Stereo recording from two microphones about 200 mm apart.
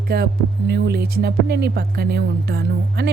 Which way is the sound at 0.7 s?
55° right (ahead or behind).